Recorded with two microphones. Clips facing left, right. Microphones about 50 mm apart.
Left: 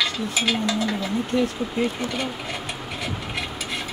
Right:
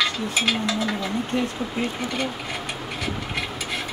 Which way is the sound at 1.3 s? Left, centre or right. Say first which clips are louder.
Left 3 dB; centre.